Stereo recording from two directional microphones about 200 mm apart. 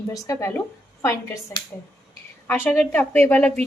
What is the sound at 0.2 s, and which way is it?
Speech, 15° left (ahead or behind).